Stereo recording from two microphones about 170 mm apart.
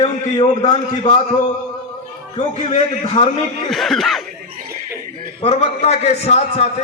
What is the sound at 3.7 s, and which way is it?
Speech, centre (ahead or behind).